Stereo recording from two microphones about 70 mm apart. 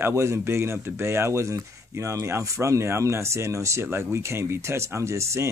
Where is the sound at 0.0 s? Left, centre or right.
Right.